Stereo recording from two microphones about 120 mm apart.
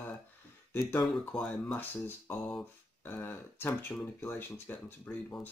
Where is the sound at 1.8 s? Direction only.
15° left (ahead or behind).